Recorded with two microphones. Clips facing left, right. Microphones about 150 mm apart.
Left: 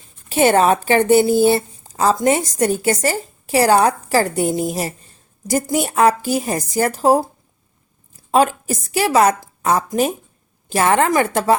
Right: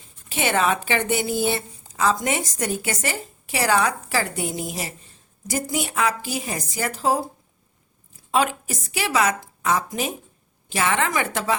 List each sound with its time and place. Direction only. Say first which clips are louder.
0.3 s a woman's voice: left 8 dB; 40° left (ahead or behind)
8.3 s a woman's voice: left 6 dB; 40° left (ahead or behind)